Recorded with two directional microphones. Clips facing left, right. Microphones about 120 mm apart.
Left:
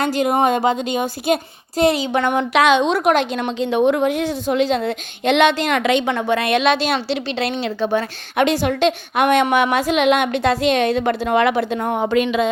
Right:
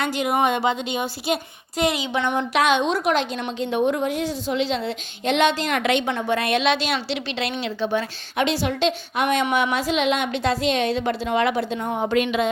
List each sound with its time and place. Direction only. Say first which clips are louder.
0.0 s a woman's voice: left 4 dB; 40° left (ahead or behind)
1.8 s a woman's voice: left 6 dB; 35° left (ahead or behind)
2.3 s a woman's voice: left 4 dB; 85° left
3.0 s a woman's voice: left 5 dB; 55° left (ahead or behind)
3.3 s a woman's voice: left 5 dB; 90° left
6.7 s a woman's voice: left 4 dB; 45° left (ahead or behind); by 12.0 s 65° left (ahead or behind)